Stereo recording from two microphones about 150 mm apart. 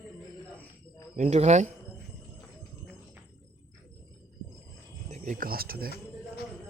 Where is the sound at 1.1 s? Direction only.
50° right (ahead or behind).